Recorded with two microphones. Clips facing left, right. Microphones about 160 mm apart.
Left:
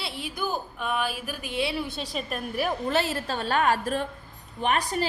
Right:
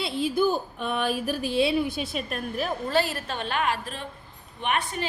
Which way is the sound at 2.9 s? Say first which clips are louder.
Even; 25° left (ahead or behind).